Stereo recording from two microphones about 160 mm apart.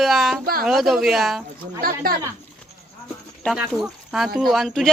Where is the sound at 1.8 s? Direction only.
70° right (ahead or behind).